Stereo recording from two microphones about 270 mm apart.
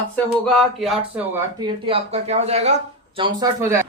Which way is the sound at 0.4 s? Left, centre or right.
Centre.